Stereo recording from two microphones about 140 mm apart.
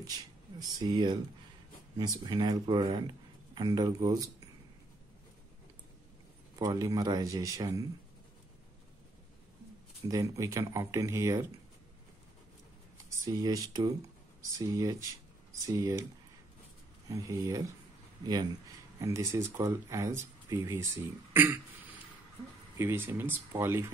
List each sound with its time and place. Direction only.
0.6 s speech: 30° right (ahead or behind)
6.6 s speech: 25° right (ahead or behind)
10.0 s speech: 25° right (ahead or behind)
12.9 s speech: 20° right (ahead or behind)
17.1 s speech: 25° right (ahead or behind)
22.8 s speech: 15° right (ahead or behind)